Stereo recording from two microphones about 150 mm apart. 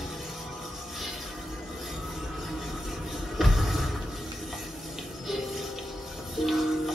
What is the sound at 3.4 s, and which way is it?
Music, centre (ahead or behind).